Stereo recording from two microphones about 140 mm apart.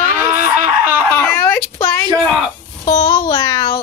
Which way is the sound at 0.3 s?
15° right (ahead or behind).